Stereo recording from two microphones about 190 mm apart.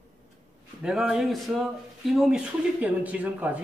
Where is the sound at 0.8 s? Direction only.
5° right (ahead or behind).